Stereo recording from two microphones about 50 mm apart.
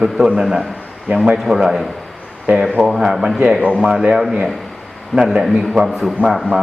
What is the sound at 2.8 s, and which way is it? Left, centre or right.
Speech, centre.